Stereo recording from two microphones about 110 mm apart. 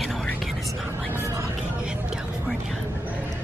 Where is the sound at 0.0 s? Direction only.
Centre (ahead or behind).